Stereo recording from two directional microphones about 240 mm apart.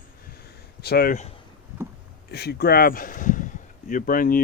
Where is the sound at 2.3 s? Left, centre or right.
Left.